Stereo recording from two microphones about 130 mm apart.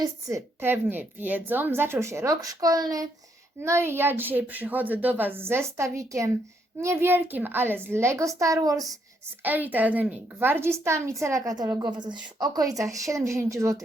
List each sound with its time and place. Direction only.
0.0 s a woman's voice: 25° right (ahead or behind)
9.4 s a woman's voice: 15° right (ahead or behind)